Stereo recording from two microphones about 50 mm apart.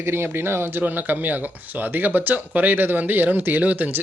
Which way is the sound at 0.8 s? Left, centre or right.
Right.